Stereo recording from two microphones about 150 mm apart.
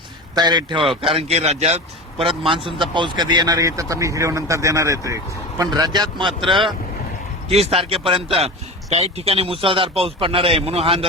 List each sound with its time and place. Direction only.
0.3 s speech: 30° right (ahead or behind)
0.8 s speech: centre (ahead or behind)
1.1 s a man's voice: 45° right (ahead or behind)